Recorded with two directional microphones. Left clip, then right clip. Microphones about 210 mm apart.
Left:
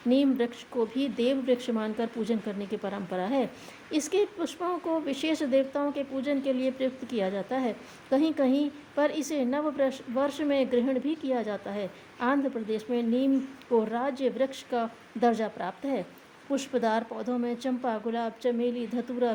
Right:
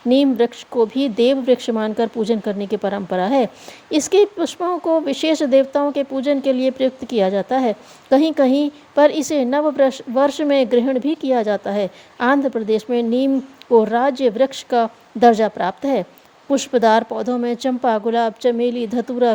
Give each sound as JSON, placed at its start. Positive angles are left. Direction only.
{"t": 0.1, "sound": "a woman's voice", "side_deg": -40}